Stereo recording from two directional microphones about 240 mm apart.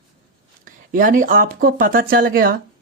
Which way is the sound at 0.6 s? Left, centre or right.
Right.